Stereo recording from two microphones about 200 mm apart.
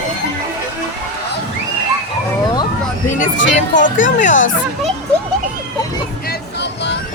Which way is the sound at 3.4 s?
40° left (ahead or behind).